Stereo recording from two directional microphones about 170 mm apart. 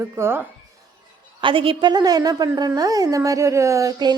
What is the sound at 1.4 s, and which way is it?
Speech, 30° right (ahead or behind).